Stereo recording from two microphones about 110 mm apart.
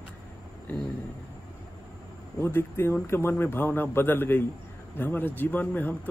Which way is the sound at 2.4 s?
20° left (ahead or behind).